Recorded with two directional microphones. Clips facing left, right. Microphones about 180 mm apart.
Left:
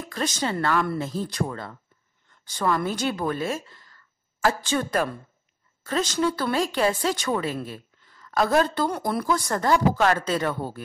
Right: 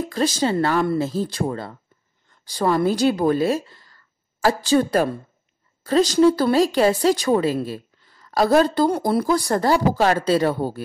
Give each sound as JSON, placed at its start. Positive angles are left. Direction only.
{"t": 0.0, "sound": "speech", "side_deg": -30}